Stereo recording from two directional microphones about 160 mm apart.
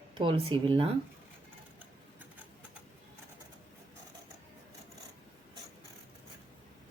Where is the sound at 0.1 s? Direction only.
30° right (ahead or behind).